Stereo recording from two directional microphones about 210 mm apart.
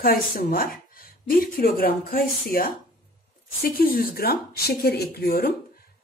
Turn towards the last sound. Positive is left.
turn(degrees=50)  # may be behind; listen again after turning